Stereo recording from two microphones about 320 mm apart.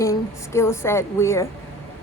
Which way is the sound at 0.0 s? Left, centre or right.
Centre.